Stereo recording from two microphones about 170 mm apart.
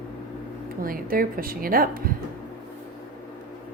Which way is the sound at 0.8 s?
55° right (ahead or behind).